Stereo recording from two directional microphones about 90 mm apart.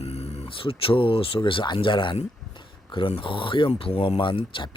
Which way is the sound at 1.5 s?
65° left (ahead or behind).